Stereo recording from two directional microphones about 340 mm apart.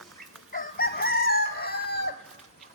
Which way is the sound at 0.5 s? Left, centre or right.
Left.